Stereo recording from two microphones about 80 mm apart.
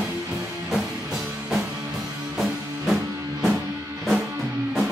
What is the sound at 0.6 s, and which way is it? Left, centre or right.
Music, centre.